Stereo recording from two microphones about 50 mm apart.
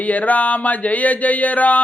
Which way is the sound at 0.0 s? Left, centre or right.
Left.